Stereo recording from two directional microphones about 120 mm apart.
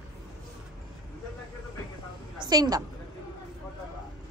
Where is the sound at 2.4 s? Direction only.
35° right (ahead or behind).